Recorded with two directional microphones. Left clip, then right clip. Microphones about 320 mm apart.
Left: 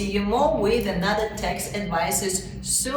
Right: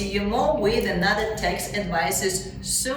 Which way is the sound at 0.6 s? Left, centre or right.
Centre.